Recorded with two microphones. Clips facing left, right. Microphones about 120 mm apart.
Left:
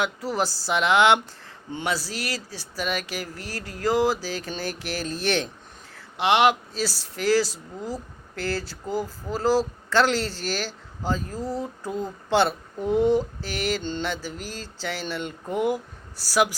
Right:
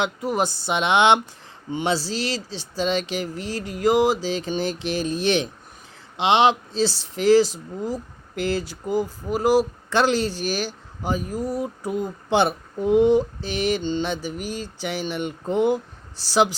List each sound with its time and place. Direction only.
0.0 s speech: 20° right (ahead or behind)